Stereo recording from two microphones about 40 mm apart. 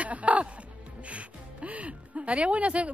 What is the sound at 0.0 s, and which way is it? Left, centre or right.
Music, right.